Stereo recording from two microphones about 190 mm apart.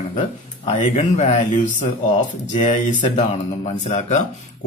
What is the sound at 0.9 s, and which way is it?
Speech, 35° left (ahead or behind).